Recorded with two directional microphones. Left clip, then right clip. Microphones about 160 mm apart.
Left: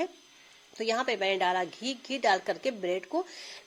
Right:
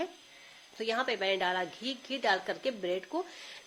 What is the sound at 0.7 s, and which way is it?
Speech, 35° left (ahead or behind).